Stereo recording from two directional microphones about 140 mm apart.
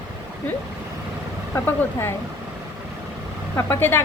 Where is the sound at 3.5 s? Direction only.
15° left (ahead or behind).